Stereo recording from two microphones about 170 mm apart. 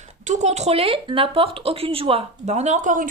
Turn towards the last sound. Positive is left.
turn(degrees=-50)  # may be behind; listen again after turning